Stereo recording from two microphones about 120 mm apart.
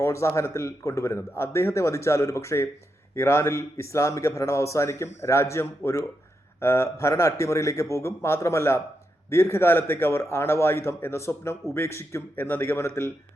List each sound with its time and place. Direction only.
0.0 s a man's voice: 20° left (ahead or behind)